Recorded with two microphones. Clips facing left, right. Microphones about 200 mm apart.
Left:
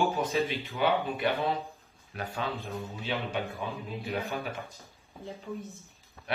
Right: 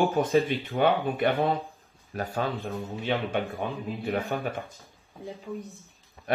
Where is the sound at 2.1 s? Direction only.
45° right (ahead or behind).